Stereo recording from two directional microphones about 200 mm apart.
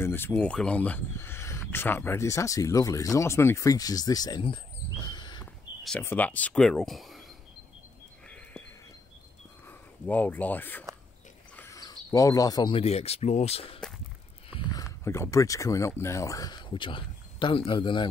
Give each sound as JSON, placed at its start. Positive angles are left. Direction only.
{"t": 0.0, "sound": "speech", "side_deg": 10}
{"t": 5.0, "sound": "a sound", "side_deg": 25}
{"t": 5.4, "sound": "speech", "side_deg": 10}
{"t": 9.7, "sound": "speech", "side_deg": 10}